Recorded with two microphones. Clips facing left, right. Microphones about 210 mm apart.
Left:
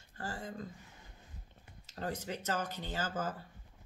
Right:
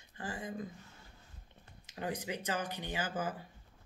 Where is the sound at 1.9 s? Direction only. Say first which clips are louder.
Right 1 dB; 15° right (ahead or behind).